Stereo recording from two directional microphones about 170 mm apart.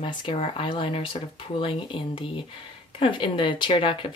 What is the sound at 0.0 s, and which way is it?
Speech, 30° left (ahead or behind).